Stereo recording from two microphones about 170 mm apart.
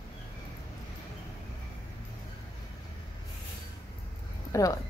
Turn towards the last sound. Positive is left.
turn(degrees=20)  # may be behind; listen again after turning